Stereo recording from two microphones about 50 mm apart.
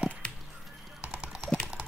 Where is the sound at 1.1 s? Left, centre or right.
Right.